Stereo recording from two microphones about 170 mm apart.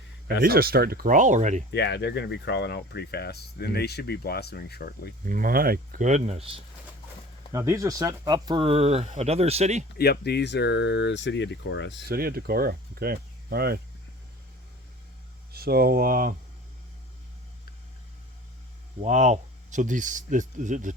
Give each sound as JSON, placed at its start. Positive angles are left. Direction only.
{"t": 0.4, "sound": "speech", "side_deg": -65}
{"t": 1.7, "sound": "speech", "side_deg": 85}
{"t": 5.2, "sound": "speech", "side_deg": -55}
{"t": 7.5, "sound": "speech", "side_deg": -15}
{"t": 10.0, "sound": "speech", "side_deg": 70}
{"t": 12.0, "sound": "speech", "side_deg": -60}
{"t": 15.5, "sound": "speech", "side_deg": -65}
{"t": 19.0, "sound": "speech", "side_deg": -45}